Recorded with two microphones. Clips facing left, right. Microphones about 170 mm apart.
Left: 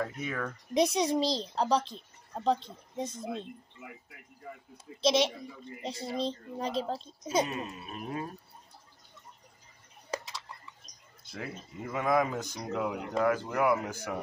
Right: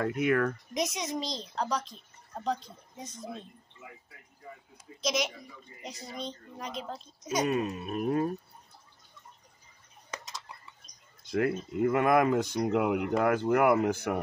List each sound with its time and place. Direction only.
0.0 s speech: 65° right (ahead or behind)
0.7 s speech: 30° left (ahead or behind)
5.0 s speech: 30° left (ahead or behind)
7.8 s a sound: 50° right (ahead or behind)
10.1 s a sound: 30° left (ahead or behind)
11.3 s speech: 65° right (ahead or behind)